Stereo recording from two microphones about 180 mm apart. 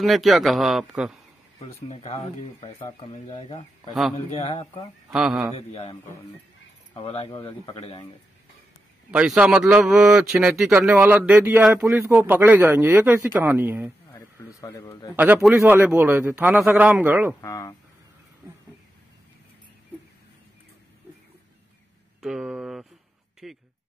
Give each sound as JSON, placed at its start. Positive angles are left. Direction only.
{"t": 0.0, "sound": "speech", "side_deg": 0}
{"t": 1.9, "sound": "speech", "side_deg": 35}
{"t": 5.1, "sound": "speech", "side_deg": -5}
{"t": 5.7, "sound": "speech", "side_deg": 40}
{"t": 9.1, "sound": "a man's voice", "side_deg": -5}
{"t": 14.1, "sound": "a sound", "side_deg": 20}
{"t": 15.1, "sound": "a man's voice", "side_deg": -10}
{"t": 17.4, "sound": "speech", "side_deg": 15}
{"t": 22.2, "sound": "a sound", "side_deg": 0}
{"t": 23.4, "sound": "speech", "side_deg": 0}